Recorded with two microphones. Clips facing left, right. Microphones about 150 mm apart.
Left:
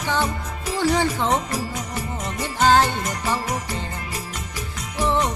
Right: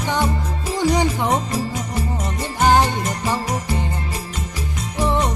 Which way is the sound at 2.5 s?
15° right (ahead or behind).